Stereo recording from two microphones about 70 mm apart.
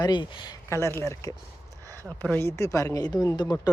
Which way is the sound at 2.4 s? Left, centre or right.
Left.